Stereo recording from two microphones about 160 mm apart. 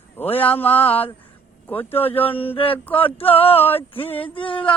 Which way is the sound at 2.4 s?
35° left (ahead or behind).